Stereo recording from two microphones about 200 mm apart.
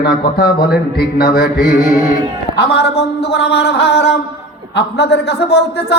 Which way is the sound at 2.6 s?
55° left (ahead or behind).